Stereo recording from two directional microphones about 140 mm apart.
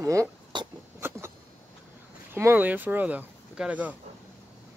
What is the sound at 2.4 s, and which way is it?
Speech, 15° right (ahead or behind).